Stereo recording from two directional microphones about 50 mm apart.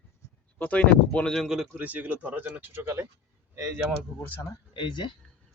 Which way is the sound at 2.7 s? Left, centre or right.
Right.